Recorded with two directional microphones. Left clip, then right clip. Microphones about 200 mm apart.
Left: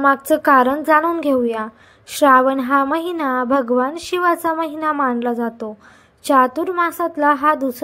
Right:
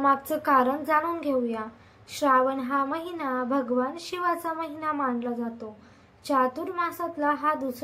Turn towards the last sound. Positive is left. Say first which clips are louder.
# left 10 dB
turn(degrees=45)  # may be behind; listen again after turning